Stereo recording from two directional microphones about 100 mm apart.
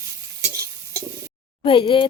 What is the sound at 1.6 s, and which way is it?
Frying, 60° left (ahead or behind).